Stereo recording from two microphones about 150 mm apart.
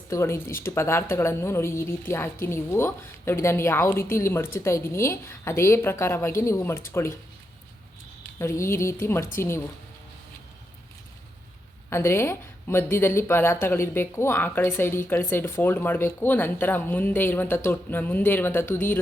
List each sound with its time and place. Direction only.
0.1 s a woman's voice: 20° left (ahead or behind)
8.4 s a woman's voice: 20° left (ahead or behind)
11.9 s a woman's voice: 15° left (ahead or behind)